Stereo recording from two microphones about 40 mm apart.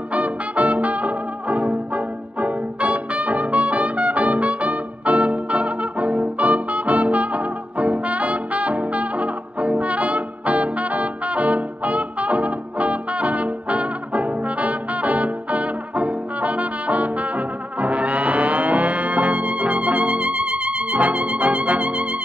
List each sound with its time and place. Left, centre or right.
0.1 s music: right